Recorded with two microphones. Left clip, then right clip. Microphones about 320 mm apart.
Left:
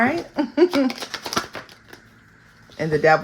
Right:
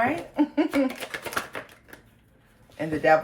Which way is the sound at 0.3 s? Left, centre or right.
Left.